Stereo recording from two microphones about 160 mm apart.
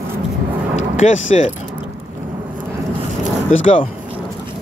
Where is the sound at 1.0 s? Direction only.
50° left (ahead or behind).